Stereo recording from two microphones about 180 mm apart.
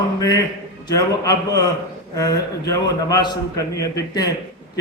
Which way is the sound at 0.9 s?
20° left (ahead or behind).